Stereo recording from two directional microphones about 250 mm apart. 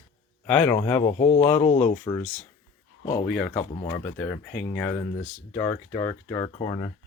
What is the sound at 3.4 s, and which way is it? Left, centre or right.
Speech, centre.